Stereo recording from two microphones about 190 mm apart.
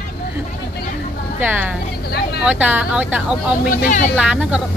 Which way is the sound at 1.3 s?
10° right (ahead or behind).